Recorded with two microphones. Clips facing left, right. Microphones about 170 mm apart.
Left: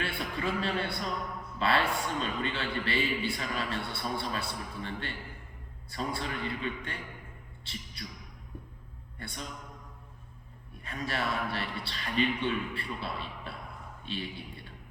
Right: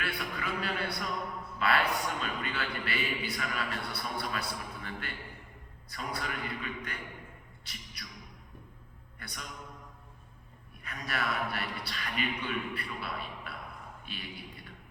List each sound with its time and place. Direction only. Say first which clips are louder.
0.0 s a sound: left 3 dB; 25° left (ahead or behind)
1.5 s a man's voice: left 1 dB; 25° left (ahead or behind)
9.1 s a man's voice: left 4 dB; 25° left (ahead or behind)
10.8 s a man's voice: left 2 dB; 25° left (ahead or behind)